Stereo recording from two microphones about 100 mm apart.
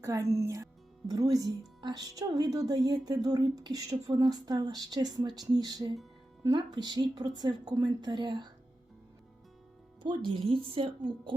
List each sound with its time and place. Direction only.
0.0 s a woman's voice: 30° right (ahead or behind); by 8.4 s 50° right (ahead or behind)
10.0 s speech: 55° right (ahead or behind)